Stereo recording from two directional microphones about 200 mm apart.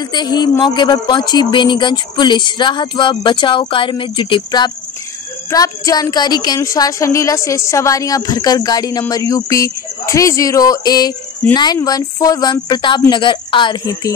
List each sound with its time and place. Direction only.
0.1 s a woman's voice: 20° left (ahead or behind)